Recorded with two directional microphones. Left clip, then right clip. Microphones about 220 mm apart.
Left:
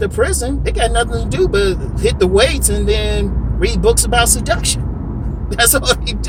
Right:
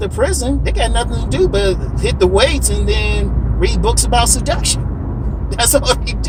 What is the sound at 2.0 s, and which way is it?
Speech, 15° left (ahead or behind).